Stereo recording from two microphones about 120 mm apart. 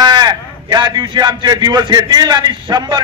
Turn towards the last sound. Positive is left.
turn(degrees=-40)  # may be behind; listen again after turning